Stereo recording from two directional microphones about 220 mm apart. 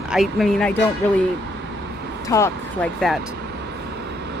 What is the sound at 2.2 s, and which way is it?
Speech, 15° left (ahead or behind).